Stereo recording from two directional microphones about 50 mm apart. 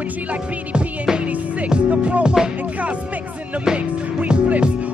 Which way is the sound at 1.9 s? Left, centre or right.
Right.